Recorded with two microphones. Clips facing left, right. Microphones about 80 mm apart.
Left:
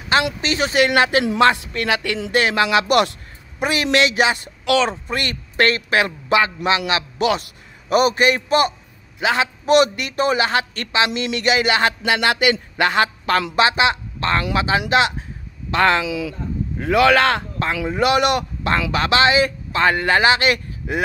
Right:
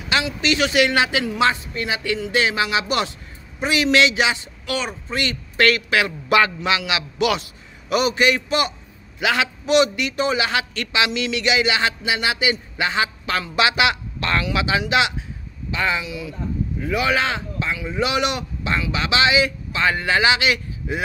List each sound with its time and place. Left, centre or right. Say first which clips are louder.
0.4 s speech: even; left
1.5 s speech: left 4 dB; left
2.3 s speech: left 5 dB; left
3.6 s speech: even; left
4.6 s speech: left 8 dB; left
5.1 s speech: left 1 dB; left
5.7 s speech: even; left
9.2 s speech: left 1 dB; left
9.7 s speech: left 2 dB; left
13.6 s speech: right 1 dB; left
15.7 s a man's voice: left 7 dB; left